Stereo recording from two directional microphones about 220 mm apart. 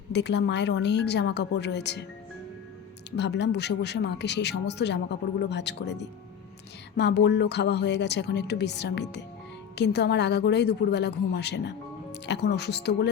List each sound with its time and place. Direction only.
0.1 s speech: 50° left (ahead or behind)
3.2 s speech: 50° left (ahead or behind)